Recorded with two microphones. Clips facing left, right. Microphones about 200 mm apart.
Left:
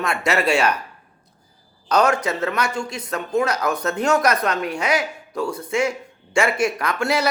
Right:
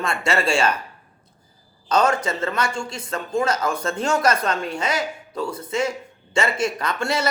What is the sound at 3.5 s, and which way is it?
Speech, 65° left (ahead or behind).